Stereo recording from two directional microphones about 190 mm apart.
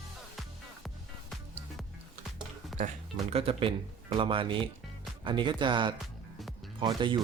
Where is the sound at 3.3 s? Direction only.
30° right (ahead or behind).